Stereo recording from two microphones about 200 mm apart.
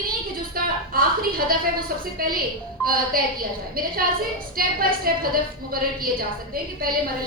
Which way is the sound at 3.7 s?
45° right (ahead or behind).